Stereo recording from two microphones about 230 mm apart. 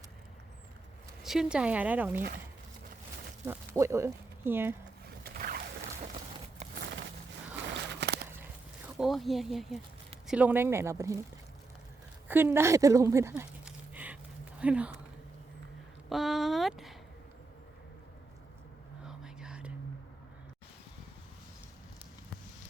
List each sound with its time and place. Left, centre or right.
1.2 s speech: centre
3.4 s speech: centre
5.2 s boat: right
7.8 s a sound: right
9.0 s speech: centre
12.3 s speech: centre
16.0 s speech: centre
19.0 s whispering: centre